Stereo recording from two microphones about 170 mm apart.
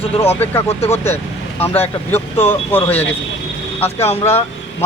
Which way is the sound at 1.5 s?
10° left (ahead or behind).